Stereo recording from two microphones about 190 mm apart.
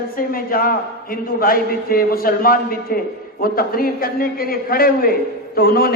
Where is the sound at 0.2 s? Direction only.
50° left (ahead or behind).